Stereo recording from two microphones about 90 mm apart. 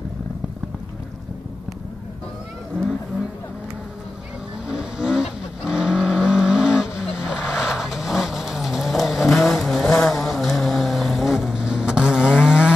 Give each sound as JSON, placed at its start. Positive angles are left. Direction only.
{"t": 4.6, "sound": "vehicle", "side_deg": -10}